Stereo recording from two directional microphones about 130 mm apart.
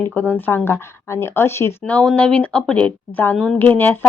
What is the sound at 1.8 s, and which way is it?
Speech, 5° left (ahead or behind).